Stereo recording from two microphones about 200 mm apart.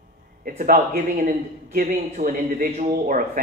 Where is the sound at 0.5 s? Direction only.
40° right (ahead or behind).